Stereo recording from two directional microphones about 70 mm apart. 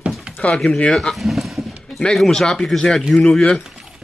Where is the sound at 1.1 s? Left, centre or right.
Centre.